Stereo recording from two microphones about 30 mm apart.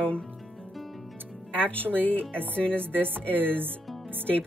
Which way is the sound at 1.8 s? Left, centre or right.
Right.